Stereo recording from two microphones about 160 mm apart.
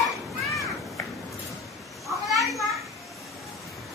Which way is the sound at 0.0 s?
20° left (ahead or behind).